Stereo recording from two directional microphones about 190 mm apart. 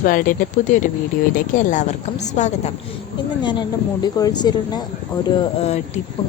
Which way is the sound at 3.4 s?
25° left (ahead or behind).